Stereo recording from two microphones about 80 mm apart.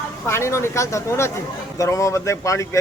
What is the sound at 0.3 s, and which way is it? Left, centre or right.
Speech, left.